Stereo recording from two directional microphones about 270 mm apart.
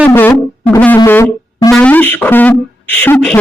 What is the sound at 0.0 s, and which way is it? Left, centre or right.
Music, centre.